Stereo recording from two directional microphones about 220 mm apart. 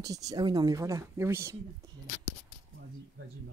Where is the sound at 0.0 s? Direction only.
15° right (ahead or behind).